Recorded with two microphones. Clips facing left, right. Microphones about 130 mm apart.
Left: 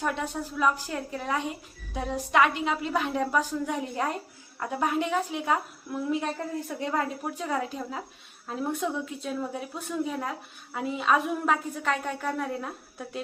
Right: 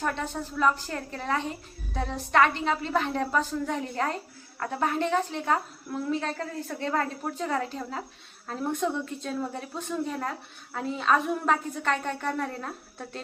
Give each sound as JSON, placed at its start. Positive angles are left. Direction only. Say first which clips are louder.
{"t": 0.0, "sound": "a woman's voice", "louder": "even", "side_deg": 5}